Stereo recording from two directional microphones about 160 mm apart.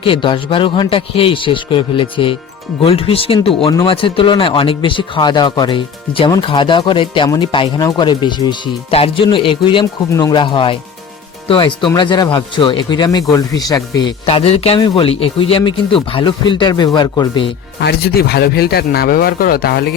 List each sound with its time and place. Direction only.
0.0 s speech: 35° left (ahead or behind)
14.3 s speech: 40° left (ahead or behind)
17.7 s speech: 80° left